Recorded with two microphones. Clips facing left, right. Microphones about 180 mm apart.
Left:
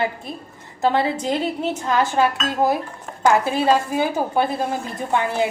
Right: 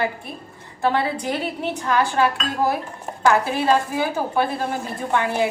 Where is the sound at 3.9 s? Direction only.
20° left (ahead or behind).